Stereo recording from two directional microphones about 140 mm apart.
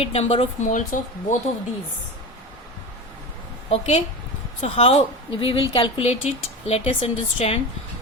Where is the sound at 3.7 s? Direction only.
50° left (ahead or behind).